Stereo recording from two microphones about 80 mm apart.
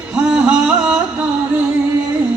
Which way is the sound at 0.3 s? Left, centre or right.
Centre.